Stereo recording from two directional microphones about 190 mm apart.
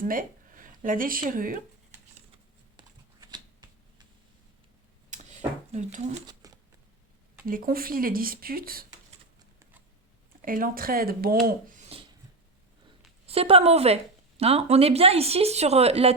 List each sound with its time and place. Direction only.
0.0 s speech: 45° right (ahead or behind)
2.7 s typing: 20° right (ahead or behind)
5.1 s a sound: 40° right (ahead or behind)
6.2 s a sound: 20° right (ahead or behind)
7.4 s speech: 50° right (ahead or behind)
10.4 s speech: 50° right (ahead or behind)
13.2 s speech: 30° right (ahead or behind)